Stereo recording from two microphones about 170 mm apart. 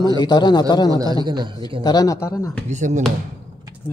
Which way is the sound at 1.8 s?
20° left (ahead or behind).